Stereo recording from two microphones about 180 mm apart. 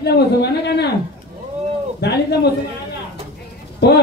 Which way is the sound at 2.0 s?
65° left (ahead or behind).